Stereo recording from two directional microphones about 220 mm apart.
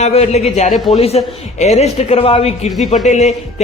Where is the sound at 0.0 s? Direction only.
30° left (ahead or behind).